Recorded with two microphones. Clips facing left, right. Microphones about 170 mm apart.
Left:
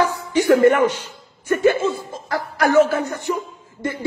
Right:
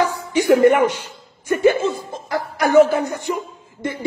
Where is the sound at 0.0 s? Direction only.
15° right (ahead or behind).